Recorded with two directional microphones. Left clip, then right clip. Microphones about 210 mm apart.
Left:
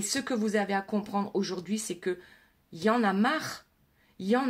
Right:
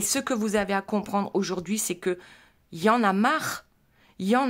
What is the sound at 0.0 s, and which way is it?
Speech, 40° right (ahead or behind).